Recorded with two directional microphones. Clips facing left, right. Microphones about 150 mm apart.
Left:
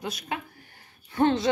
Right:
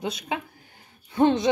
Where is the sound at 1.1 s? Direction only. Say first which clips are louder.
Right 3 dB; 20° right (ahead or behind).